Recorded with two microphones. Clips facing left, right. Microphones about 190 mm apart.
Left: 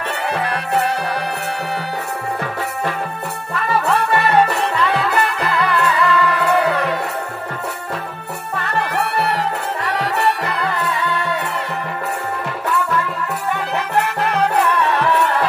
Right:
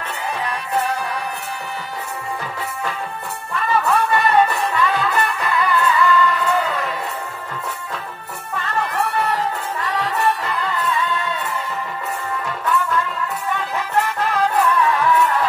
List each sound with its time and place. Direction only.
0.3 s music: 65° left (ahead or behind)
3.8 s music: 70° left (ahead or behind)
8.9 s music: 65° left (ahead or behind)
13.7 s music: 70° left (ahead or behind)